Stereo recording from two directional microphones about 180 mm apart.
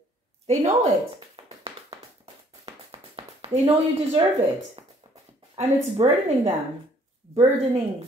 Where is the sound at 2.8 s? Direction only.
30° right (ahead or behind).